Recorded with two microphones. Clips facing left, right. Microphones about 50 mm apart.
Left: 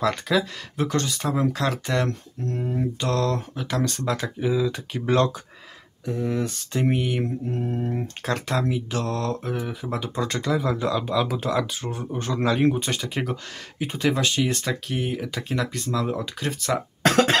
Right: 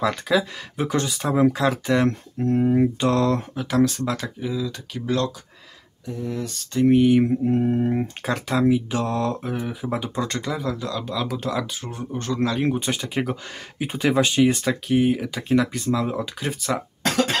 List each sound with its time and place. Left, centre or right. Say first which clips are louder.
0.0 s speech: right 1 dB; centre
2.4 s mantra: right 9 dB; centre
3.0 s speech: right 4 dB; centre
4.4 s speech: left 4 dB; centre; by 6.5 s left
6.7 s speech: right 7 dB; centre
7.0 s speech: right 9 dB; centre
7.4 s mantra: right 7 dB; right
8.2 s speech: right 1 dB; centre
10.7 s speech: left 4 dB; centre
12.6 s speech: left 1 dB; centre
17.0 s cough: left 4 dB; left